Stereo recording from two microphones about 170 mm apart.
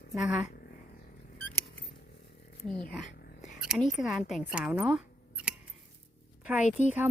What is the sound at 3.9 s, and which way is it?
Speech, centre (ahead or behind).